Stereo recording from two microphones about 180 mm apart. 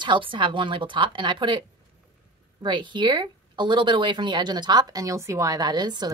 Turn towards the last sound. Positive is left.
turn(degrees=-25)  # may be behind; listen again after turning